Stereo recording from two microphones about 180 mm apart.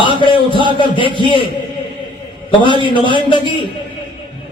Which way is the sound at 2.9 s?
25° left (ahead or behind).